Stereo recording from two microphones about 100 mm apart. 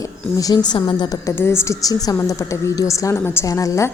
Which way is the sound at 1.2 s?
25° left (ahead or behind).